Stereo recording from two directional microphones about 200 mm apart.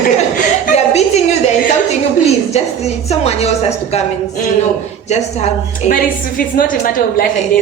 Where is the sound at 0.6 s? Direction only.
35° left (ahead or behind).